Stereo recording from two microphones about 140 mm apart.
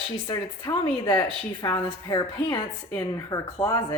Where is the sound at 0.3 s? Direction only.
35° left (ahead or behind).